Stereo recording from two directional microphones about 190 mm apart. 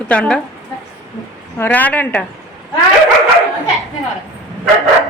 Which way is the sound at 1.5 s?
10° left (ahead or behind).